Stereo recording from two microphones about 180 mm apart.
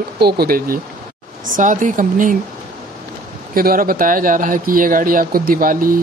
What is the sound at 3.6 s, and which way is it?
Speech, 55° right (ahead or behind).